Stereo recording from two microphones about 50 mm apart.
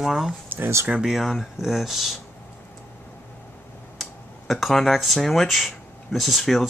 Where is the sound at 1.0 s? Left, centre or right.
Centre.